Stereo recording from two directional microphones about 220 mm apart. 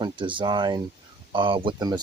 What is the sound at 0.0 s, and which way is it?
Speech, 20° right (ahead or behind).